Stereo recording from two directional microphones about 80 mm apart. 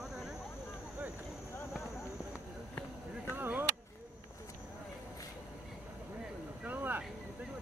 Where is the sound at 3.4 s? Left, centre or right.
Right.